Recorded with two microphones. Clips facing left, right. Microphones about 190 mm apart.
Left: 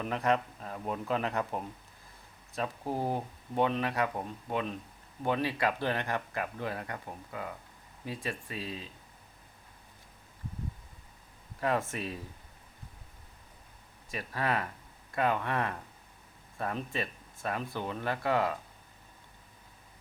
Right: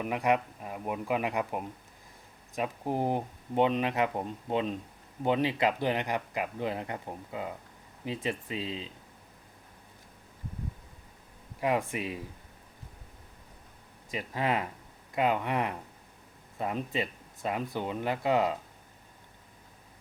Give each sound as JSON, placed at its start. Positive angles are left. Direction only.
{"t": 0.0, "sound": "speech", "side_deg": -10}
{"t": 11.6, "sound": "speech", "side_deg": -15}
{"t": 14.1, "sound": "speech", "side_deg": -15}